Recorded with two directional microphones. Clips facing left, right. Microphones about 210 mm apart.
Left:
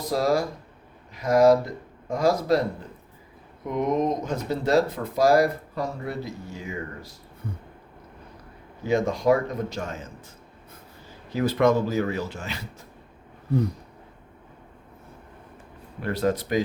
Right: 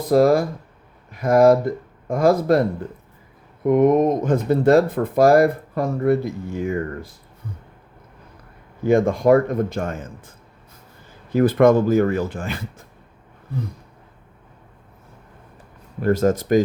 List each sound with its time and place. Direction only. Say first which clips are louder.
0.1 s speech: right 8 dB; 55° right (ahead or behind)
3.7 s speech: right 9 dB; 55° right (ahead or behind)
8.8 s speech: right 6 dB; 55° right (ahead or behind)
16.0 s speech: right 7 dB; 45° right (ahead or behind)